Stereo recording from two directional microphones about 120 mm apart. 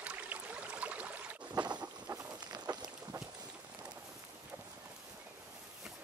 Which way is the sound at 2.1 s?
35° right (ahead or behind).